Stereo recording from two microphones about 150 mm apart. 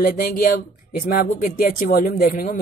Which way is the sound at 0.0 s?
75° left (ahead or behind).